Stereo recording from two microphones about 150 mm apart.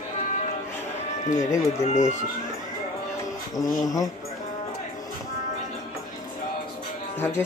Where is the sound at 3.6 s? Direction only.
25° left (ahead or behind).